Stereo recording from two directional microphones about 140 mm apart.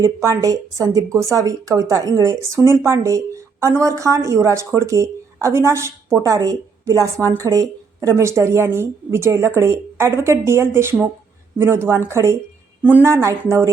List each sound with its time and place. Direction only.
0.0 s a woman's voice: 20° right (ahead or behind)